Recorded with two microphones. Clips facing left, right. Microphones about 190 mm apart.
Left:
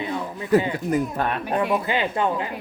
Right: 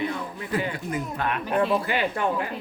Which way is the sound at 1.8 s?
20° left (ahead or behind).